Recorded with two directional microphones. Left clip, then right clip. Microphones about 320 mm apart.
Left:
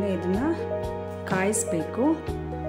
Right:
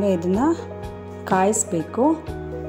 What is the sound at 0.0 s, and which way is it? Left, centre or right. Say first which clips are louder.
Speech: right 6 dB; centre.